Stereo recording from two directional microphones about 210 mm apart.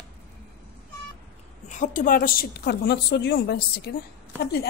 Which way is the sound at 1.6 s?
35° left (ahead or behind).